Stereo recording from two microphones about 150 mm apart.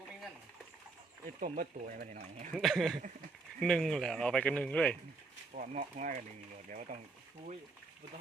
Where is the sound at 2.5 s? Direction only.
Centre (ahead or behind).